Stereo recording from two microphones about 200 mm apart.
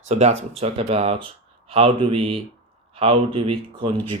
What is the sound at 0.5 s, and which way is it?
Speech, 30° right (ahead or behind).